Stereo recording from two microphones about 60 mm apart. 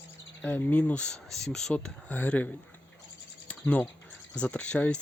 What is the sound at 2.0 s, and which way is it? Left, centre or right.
Speech, left.